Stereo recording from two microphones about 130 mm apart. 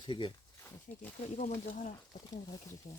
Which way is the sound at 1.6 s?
75° left (ahead or behind).